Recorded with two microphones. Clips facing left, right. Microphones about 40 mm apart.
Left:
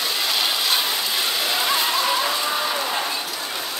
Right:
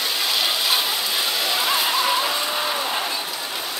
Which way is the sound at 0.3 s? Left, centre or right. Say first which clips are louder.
Right 1 dB; centre.